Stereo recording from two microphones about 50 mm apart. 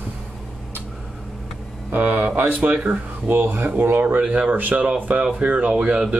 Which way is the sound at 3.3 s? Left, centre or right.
Right.